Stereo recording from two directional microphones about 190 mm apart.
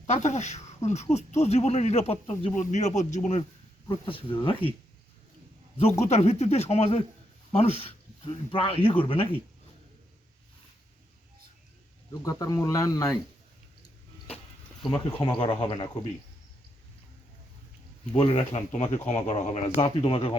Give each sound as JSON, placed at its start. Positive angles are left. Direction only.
{"t": 0.1, "sound": "speech", "side_deg": 35}
{"t": 5.8, "sound": "speech", "side_deg": 35}
{"t": 12.1, "sound": "speech", "side_deg": 20}
{"t": 14.8, "sound": "speech", "side_deg": 0}
{"t": 15.2, "sound": "speech", "side_deg": 25}
{"t": 18.1, "sound": "speech", "side_deg": 25}